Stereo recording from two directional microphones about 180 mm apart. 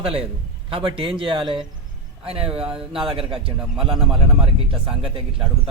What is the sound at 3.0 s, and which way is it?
A man's voice, 30° right (ahead or behind).